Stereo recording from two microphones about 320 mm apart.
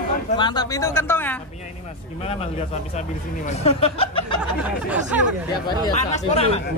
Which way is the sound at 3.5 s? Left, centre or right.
Centre.